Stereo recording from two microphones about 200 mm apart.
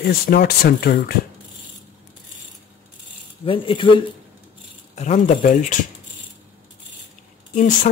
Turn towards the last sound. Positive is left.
turn(degrees=40)  # may be behind; listen again after turning